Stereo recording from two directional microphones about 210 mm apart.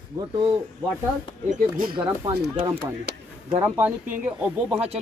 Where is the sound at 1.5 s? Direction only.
40° right (ahead or behind).